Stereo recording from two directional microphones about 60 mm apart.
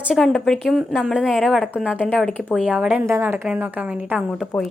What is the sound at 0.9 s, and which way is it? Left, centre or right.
Speech, centre.